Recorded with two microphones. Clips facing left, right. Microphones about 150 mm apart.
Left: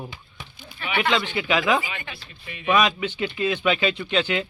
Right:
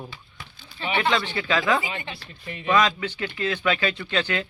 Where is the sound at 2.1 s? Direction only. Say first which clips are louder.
Right 3 dB; 35° right (ahead or behind).